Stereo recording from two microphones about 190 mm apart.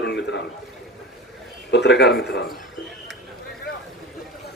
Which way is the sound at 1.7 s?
65° left (ahead or behind).